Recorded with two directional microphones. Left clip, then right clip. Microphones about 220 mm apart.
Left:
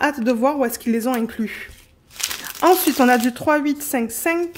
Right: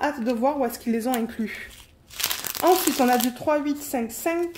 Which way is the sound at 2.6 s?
40° left (ahead or behind).